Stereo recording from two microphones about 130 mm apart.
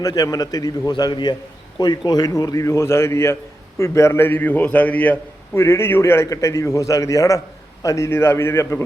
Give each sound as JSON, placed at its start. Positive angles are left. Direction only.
{"t": 0.0, "sound": "a man's voice", "side_deg": 25}